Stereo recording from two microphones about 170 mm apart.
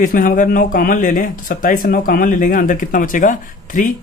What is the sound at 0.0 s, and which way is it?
Speech, 55° left (ahead or behind).